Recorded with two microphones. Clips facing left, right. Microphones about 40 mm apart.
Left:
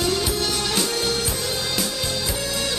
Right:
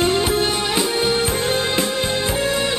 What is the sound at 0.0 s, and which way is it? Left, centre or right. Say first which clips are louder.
Music: right 5 dB; right.